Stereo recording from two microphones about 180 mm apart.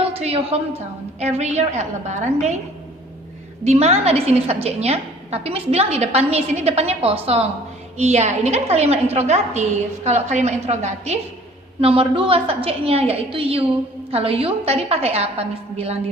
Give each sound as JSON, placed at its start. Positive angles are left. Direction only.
{"t": 0.2, "sound": "a woman's voice", "side_deg": -35}
{"t": 3.7, "sound": "a woman's voice", "side_deg": -35}